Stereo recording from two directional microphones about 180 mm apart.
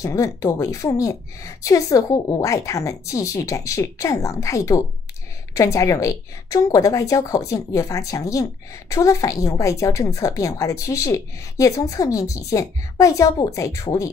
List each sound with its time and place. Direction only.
0.0 s a woman's voice: 20° left (ahead or behind)